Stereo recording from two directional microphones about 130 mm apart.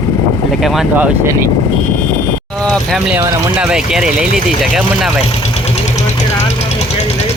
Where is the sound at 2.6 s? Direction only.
5° left (ahead or behind).